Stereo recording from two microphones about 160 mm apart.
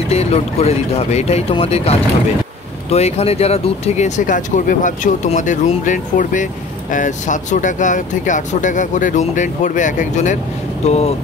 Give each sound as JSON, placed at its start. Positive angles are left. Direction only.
{"t": 0.1, "sound": "speech", "side_deg": 40}